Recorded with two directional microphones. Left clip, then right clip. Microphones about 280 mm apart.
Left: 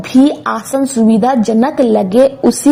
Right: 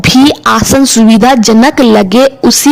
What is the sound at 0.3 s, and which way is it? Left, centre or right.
Speech, right.